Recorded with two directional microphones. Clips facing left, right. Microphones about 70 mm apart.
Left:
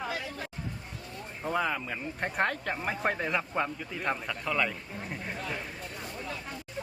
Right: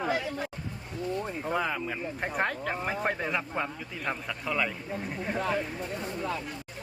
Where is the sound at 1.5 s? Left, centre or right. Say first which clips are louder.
Left 1 dB; centre.